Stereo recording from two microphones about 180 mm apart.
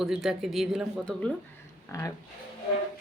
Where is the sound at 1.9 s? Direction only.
15° left (ahead or behind).